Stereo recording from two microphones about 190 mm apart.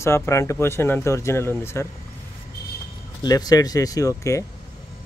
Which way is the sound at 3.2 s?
20° left (ahead or behind).